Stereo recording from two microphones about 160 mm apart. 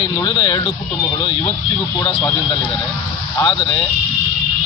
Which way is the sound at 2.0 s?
20° left (ahead or behind).